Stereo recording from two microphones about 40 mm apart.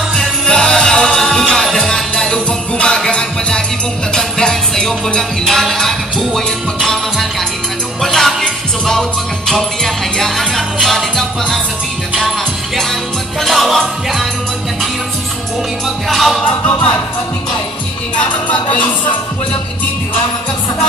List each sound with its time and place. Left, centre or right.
0.1 s music: centre
13.4 s music: centre
16.1 s music: centre
16.4 s music: left
18.2 s music: left